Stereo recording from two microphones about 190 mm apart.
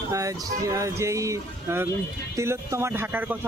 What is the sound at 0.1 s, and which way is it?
Speech, 15° right (ahead or behind).